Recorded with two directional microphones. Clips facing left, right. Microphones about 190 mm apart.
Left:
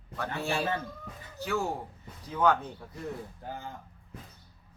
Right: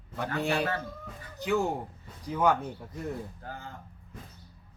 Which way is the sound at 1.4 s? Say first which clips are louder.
Right 3 dB; 15° right (ahead or behind).